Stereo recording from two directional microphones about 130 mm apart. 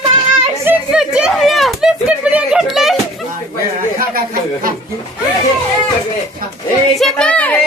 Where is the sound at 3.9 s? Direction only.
90° right.